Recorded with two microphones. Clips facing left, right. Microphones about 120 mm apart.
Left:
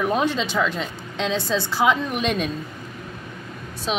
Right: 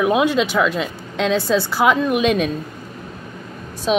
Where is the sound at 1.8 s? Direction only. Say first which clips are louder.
Right 3 dB; 55° right (ahead or behind).